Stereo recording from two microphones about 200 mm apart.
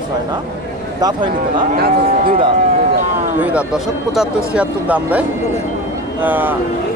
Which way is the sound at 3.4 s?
5° right (ahead or behind).